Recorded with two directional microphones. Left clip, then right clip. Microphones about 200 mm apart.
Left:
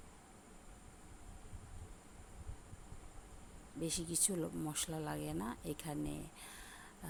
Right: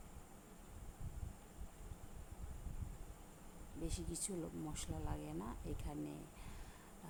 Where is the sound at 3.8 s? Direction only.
25° left (ahead or behind).